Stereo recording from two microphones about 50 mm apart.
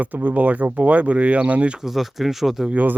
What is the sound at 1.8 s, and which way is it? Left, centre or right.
Speech, centre.